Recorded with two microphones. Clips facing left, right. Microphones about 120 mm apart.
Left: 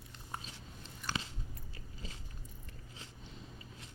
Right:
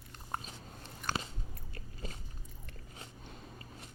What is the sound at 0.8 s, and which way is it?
Biting, 55° right (ahead or behind).